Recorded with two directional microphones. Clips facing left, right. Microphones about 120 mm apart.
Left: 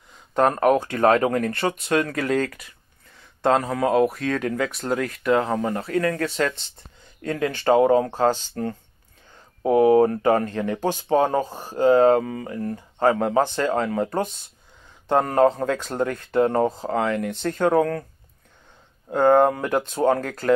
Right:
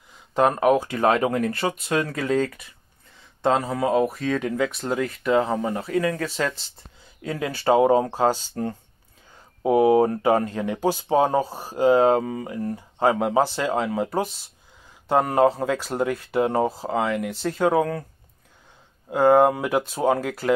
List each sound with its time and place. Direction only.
0.3 s speech: 10° right (ahead or behind)
2.0 s speech: 25° right (ahead or behind)
2.2 s speech: centre (ahead or behind)
9.6 s speech: 15° right (ahead or behind)
19.0 s speech: 5° right (ahead or behind)